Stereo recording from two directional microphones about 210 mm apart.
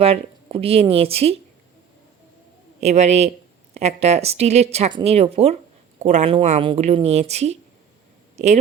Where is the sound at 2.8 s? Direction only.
30° right (ahead or behind).